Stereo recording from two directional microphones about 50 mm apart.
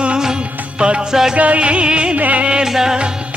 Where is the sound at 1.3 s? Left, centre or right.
Right.